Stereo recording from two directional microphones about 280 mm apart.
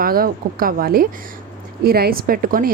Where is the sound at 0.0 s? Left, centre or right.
Right.